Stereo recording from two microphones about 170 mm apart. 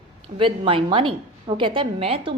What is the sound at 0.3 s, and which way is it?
A woman's voice, 30° right (ahead or behind).